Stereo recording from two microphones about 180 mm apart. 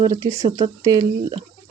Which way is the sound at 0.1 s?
15° right (ahead or behind).